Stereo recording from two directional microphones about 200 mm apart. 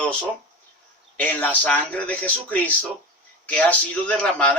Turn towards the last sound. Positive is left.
turn(degrees=5)  # may be behind; listen again after turning